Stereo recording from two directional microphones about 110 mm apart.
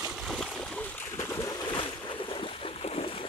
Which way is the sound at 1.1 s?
25° left (ahead or behind).